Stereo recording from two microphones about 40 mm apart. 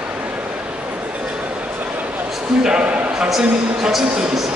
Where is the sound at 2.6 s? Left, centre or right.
Right.